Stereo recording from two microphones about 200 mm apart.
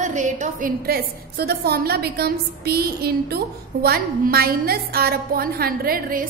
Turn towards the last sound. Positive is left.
turn(degrees=-45)  # may be behind; listen again after turning